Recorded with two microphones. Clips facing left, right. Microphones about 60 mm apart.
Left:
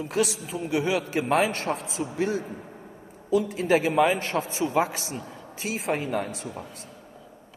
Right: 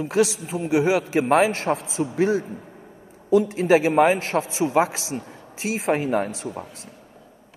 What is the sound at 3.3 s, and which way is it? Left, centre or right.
Speech, right.